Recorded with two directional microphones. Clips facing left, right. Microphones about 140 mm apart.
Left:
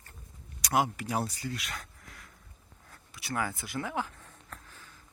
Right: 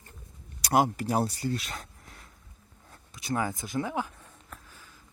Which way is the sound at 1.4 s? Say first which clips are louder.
Right 6 dB; 30° right (ahead or behind).